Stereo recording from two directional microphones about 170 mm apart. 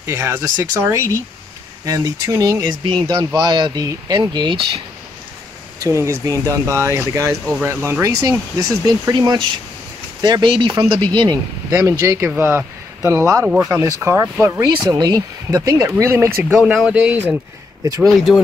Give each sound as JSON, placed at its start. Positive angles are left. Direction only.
{"t": 0.0, "sound": "speech", "side_deg": -15}
{"t": 5.9, "sound": "speech", "side_deg": -15}
{"t": 16.5, "sound": "speech", "side_deg": -5}